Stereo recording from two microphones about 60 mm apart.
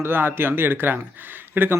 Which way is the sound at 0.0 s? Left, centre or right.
Right.